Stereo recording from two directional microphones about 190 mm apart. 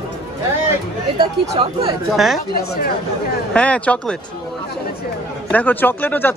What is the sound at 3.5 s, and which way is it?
Speech, 5° left (ahead or behind).